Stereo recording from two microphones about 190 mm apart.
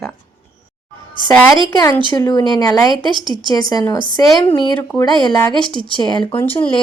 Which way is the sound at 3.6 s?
20° left (ahead or behind).